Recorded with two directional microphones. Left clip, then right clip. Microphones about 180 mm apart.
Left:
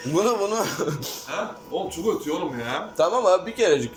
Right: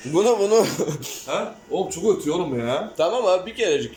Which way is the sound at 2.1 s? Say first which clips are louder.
Right 4 dB; 50° right (ahead or behind).